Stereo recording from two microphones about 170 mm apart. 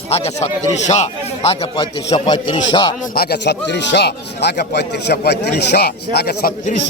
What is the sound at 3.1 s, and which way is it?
Speech, 65° left (ahead or behind).